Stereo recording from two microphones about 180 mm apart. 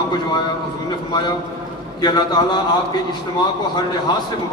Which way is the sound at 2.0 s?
25° left (ahead or behind).